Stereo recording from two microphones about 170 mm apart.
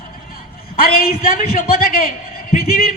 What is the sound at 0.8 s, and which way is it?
A man's voice, 60° left (ahead or behind).